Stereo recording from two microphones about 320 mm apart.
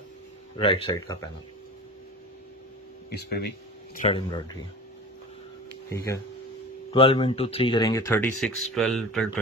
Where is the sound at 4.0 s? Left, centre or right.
Centre.